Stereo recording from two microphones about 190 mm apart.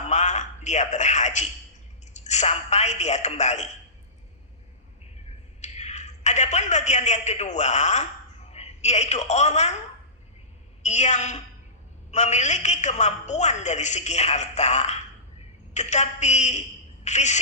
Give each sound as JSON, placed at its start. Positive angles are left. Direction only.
{"t": 0.1, "sound": "a sound", "side_deg": 40}
{"t": 2.1, "sound": "a woman's voice", "side_deg": 35}
{"t": 5.6, "sound": "a man's voice", "side_deg": 35}
{"t": 10.8, "sound": "a woman's voice", "side_deg": 35}